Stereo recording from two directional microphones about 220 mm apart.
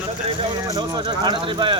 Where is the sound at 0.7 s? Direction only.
20° right (ahead or behind).